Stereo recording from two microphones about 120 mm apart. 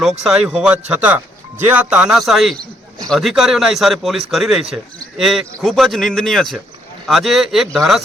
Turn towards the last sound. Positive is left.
turn(degrees=0)  # may be behind; listen again after turning